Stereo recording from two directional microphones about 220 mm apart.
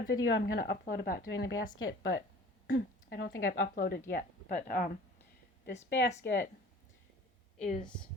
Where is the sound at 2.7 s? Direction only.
50° left (ahead or behind).